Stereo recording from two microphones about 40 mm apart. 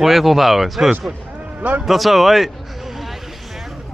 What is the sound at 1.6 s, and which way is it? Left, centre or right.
Speech, right.